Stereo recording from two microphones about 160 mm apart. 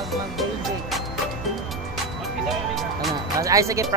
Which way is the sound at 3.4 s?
20° right (ahead or behind).